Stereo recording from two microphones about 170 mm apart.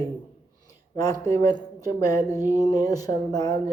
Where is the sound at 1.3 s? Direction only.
20° left (ahead or behind).